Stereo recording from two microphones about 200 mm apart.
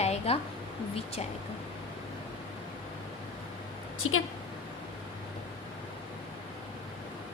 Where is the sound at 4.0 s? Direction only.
90° left.